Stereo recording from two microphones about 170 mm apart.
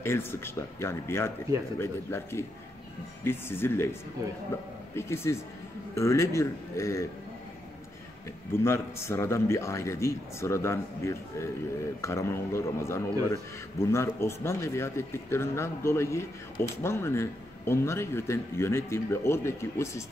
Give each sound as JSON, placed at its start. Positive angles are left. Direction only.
{"t": 0.0, "sound": "a man's voice", "side_deg": 15}
{"t": 4.2, "sound": "a man's voice", "side_deg": -20}
{"t": 4.9, "sound": "a man's voice", "side_deg": 15}
{"t": 8.6, "sound": "a man's voice", "side_deg": 15}